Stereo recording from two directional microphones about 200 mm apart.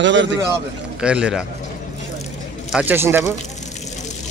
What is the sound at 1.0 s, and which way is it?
Speech, 5° right (ahead or behind).